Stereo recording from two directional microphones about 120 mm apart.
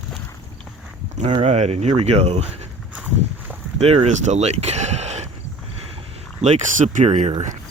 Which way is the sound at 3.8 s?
60° right (ahead or behind).